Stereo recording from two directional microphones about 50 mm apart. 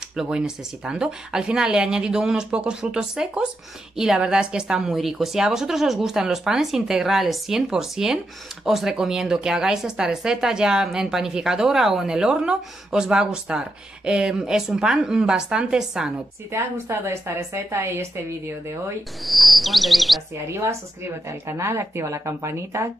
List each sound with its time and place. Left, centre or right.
0.8 s a woman's voice: centre
2.8 s a woman's voice: centre
4.9 s a woman's voice: centre
16.5 s speech: right
19.2 s insect: centre
20.4 s a woman's voice: right